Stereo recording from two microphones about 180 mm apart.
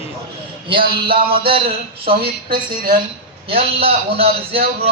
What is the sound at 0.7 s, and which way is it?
Speech, 30° right (ahead or behind).